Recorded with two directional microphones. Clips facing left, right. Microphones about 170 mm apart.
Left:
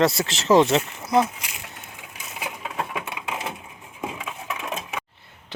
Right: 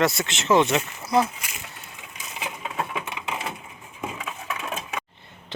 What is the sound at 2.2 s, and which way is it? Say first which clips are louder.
Crushing: even; 5° left (ahead or behind).